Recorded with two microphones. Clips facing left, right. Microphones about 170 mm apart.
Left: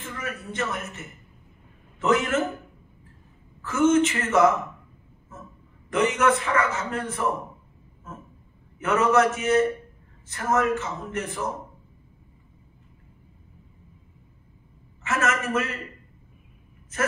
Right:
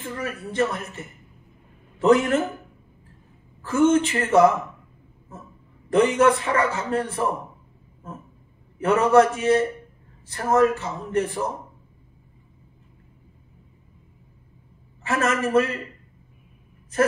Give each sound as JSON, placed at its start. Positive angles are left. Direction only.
{"t": 0.0, "sound": "a man's voice", "side_deg": -35}
{"t": 3.6, "sound": "a man's voice", "side_deg": -35}
{"t": 5.9, "sound": "a man's voice", "side_deg": -35}
{"t": 8.7, "sound": "a man's voice", "side_deg": -35}
{"t": 15.0, "sound": "a man's voice", "side_deg": -35}